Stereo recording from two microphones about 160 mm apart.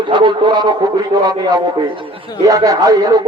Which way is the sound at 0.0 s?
30° right (ahead or behind).